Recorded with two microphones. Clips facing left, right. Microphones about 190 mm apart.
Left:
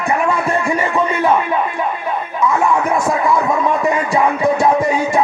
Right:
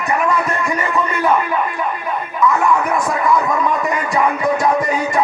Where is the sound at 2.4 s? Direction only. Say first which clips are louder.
Even; 25° left (ahead or behind).